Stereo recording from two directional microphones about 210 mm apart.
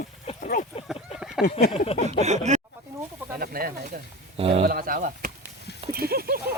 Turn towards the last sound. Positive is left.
turn(degrees=-45)  # may be behind; listen again after turning